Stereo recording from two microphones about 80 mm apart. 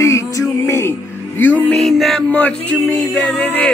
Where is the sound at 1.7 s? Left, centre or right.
Centre.